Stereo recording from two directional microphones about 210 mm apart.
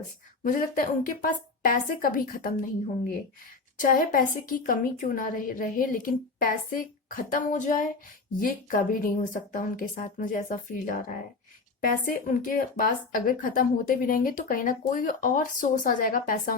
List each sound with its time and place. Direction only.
0.4 s speech: 40° left (ahead or behind)
3.8 s speech: 40° left (ahead or behind)